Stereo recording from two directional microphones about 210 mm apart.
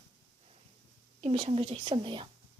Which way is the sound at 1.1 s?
30° right (ahead or behind).